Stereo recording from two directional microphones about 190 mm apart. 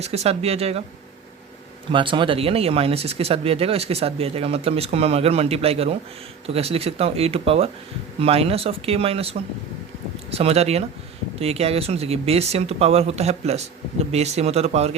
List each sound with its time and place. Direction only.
0.0 s speech: 35° right (ahead or behind)
1.9 s speech: 25° right (ahead or behind)